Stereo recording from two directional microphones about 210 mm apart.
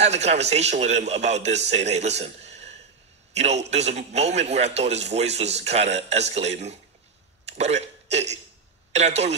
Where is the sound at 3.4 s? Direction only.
30° right (ahead or behind).